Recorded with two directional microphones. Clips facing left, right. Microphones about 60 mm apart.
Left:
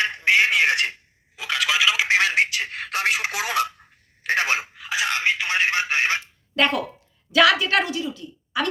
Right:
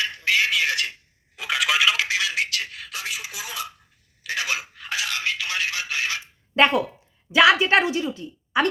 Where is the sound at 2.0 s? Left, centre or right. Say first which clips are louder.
Left 6 dB; left.